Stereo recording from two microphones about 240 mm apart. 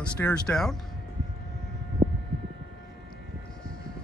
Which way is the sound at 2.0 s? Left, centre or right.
Centre.